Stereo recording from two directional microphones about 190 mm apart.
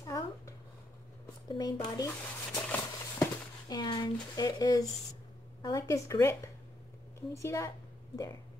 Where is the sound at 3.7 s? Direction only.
20° left (ahead or behind).